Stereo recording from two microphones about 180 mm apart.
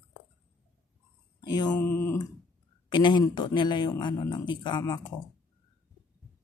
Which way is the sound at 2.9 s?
25° left (ahead or behind).